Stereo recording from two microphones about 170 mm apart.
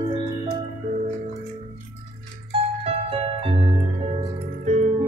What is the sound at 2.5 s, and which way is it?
Music, 35° right (ahead or behind).